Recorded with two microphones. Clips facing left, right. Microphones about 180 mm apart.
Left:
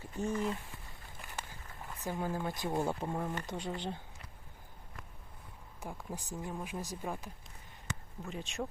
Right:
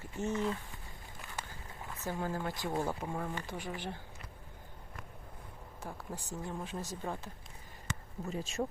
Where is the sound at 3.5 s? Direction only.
25° left (ahead or behind).